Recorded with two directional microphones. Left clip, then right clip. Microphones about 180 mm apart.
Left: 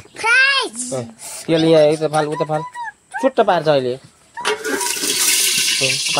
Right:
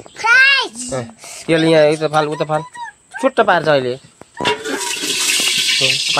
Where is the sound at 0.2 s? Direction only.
40° left (ahead or behind).